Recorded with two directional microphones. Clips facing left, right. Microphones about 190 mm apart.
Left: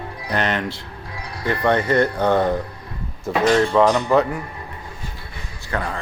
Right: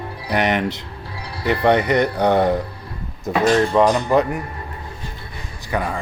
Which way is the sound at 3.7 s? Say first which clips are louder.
Even; 15° right (ahead or behind).